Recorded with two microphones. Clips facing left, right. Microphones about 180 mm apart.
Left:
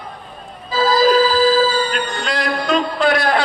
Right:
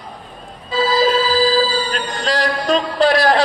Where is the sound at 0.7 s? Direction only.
30° right (ahead or behind).